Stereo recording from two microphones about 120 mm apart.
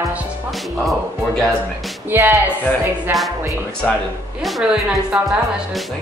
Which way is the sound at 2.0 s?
20° right (ahead or behind).